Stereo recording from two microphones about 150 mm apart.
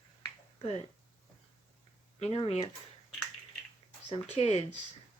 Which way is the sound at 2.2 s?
40° left (ahead or behind).